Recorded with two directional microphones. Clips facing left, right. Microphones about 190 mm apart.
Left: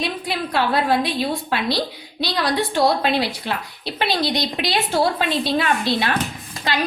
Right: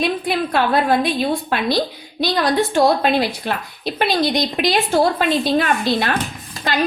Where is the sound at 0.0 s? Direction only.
50° right (ahead or behind).